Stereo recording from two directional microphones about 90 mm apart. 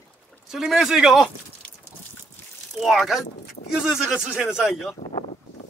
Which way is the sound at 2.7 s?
Centre (ahead or behind).